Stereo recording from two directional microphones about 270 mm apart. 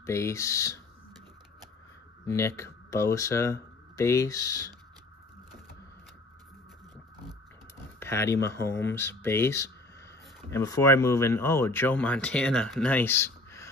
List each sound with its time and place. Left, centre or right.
0.0 s speech: centre
2.2 s speech: centre
8.0 s speech: centre